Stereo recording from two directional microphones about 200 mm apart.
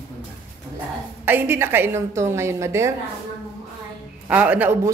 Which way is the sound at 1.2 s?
10° right (ahead or behind).